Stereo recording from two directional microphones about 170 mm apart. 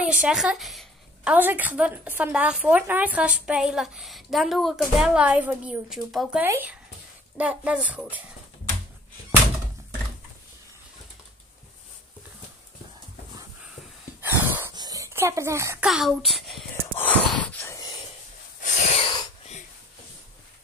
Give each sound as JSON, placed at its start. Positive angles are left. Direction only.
{"t": 0.0, "sound": "a woman's voice", "side_deg": -5}
{"t": 14.2, "sound": "a sound", "side_deg": -10}
{"t": 15.8, "sound": "a woman's voice", "side_deg": 0}
{"t": 17.0, "sound": "gasp", "side_deg": 10}
{"t": 17.7, "sound": "a sound", "side_deg": 25}
{"t": 18.6, "sound": "wheeze", "side_deg": 45}